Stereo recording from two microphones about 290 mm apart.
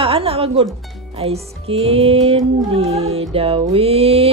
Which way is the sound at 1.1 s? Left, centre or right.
Centre.